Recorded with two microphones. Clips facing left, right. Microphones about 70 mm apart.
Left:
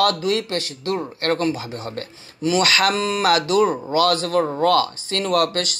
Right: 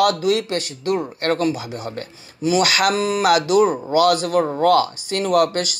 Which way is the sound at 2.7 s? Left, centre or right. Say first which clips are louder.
Right 1 dB; centre.